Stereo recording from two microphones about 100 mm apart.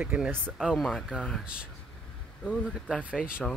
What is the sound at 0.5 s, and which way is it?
Speech, centre (ahead or behind).